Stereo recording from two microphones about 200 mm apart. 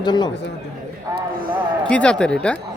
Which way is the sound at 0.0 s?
20° left (ahead or behind).